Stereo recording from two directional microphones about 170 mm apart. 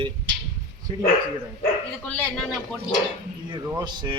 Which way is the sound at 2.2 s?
5° left (ahead or behind).